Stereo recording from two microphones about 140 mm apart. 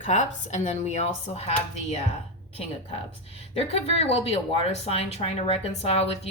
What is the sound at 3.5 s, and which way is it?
Speech, 45° left (ahead or behind).